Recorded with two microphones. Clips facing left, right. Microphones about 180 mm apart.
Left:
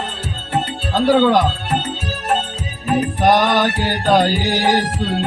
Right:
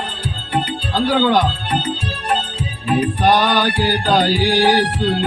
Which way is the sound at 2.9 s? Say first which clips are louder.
Even; 40° left (ahead or behind).